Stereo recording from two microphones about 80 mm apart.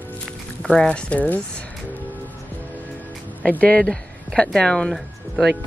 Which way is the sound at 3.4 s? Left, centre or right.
Centre.